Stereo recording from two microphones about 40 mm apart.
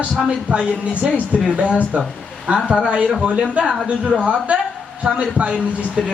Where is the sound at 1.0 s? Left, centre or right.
Centre.